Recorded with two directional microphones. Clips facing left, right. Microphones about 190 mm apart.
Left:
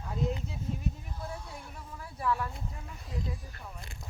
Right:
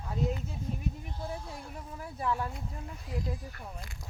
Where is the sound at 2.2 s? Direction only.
25° right (ahead or behind).